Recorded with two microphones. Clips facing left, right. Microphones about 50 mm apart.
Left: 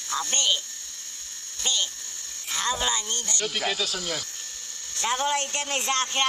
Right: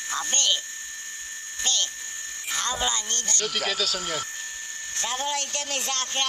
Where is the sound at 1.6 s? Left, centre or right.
Centre.